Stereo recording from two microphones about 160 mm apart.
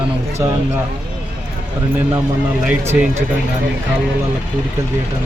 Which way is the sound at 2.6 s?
10° right (ahead or behind).